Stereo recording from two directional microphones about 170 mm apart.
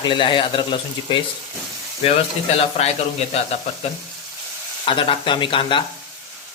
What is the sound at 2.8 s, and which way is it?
Frying, 40° left (ahead or behind).